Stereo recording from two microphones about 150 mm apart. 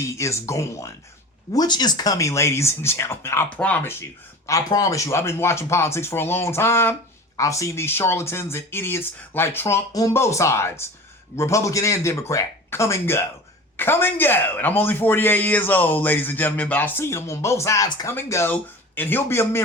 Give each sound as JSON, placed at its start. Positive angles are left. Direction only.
{"t": 0.1, "sound": "a man's voice", "side_deg": 20}
{"t": 4.4, "sound": "a man's voice", "side_deg": 25}